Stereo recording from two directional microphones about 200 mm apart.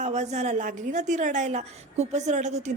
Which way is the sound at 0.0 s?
35° right (ahead or behind).